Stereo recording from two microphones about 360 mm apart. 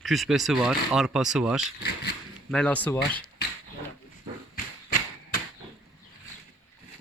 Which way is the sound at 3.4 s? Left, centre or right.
Left.